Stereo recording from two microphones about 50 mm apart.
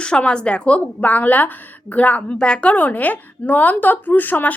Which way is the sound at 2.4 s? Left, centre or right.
Left.